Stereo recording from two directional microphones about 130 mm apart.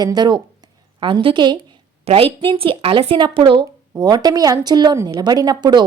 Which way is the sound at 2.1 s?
45° right (ahead or behind).